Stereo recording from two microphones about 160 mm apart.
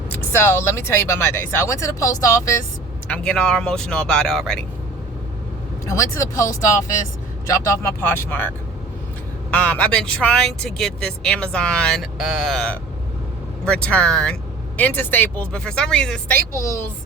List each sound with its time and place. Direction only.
0.1 s speech: 15° left (ahead or behind)
3.1 s speech: 5° left (ahead or behind)
5.9 s speech: 20° left (ahead or behind)
16.6 s speech: 20° left (ahead or behind)